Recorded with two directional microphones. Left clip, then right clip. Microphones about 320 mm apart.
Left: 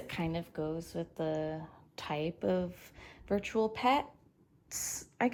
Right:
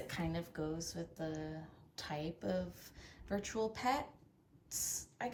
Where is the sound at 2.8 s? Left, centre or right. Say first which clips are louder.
Left 7 dB; centre.